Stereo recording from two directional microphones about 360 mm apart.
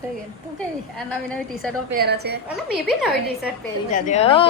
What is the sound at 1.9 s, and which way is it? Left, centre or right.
Speech, right.